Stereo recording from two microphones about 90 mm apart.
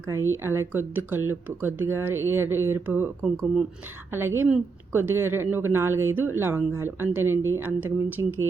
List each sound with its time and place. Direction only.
0.1 s speech: 25° right (ahead or behind)
3.3 s speech: 10° right (ahead or behind)
4.1 s speech: 25° right (ahead or behind)